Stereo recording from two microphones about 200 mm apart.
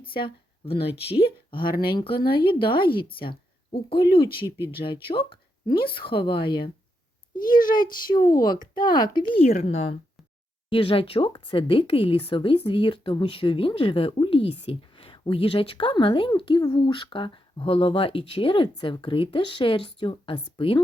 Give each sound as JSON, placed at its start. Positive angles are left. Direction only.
{"t": 0.0, "sound": "speech", "side_deg": 25}
{"t": 4.4, "sound": "speech", "side_deg": -10}
{"t": 4.8, "sound": "speech", "side_deg": 25}
{"t": 8.0, "sound": "speech", "side_deg": 20}